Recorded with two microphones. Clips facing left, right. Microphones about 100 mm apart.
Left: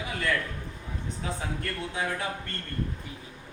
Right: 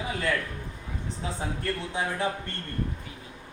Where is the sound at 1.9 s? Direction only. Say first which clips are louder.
Right 2 dB; 25° right (ahead or behind).